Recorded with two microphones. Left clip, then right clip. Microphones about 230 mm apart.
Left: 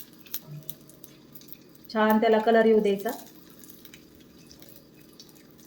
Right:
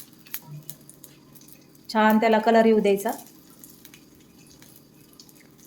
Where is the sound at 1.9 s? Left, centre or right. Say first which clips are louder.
Right 2 dB; right.